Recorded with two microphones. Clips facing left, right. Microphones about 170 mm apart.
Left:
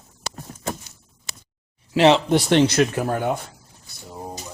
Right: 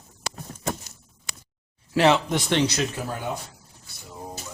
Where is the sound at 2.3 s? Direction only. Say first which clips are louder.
Left 6 dB; 40° left (ahead or behind); by 3.4 s 55° left (ahead or behind).